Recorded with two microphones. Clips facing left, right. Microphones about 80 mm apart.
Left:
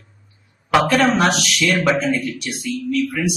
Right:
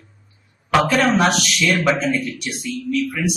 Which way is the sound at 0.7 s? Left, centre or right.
Centre.